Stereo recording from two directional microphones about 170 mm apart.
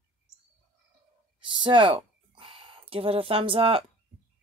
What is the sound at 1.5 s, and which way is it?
Speech, 30° right (ahead or behind).